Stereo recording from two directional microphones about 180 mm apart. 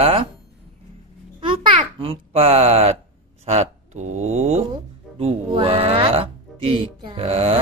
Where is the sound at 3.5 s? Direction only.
40° right (ahead or behind).